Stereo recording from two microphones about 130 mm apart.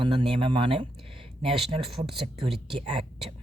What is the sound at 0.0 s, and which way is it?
Speech, 40° right (ahead or behind).